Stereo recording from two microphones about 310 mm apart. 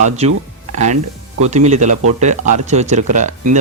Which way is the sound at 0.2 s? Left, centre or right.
Centre.